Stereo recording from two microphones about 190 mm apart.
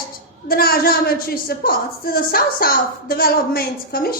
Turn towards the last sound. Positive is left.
turn(degrees=55)  # may be behind; listen again after turning